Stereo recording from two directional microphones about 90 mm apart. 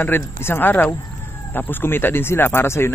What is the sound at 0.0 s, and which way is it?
Speech, 25° left (ahead or behind).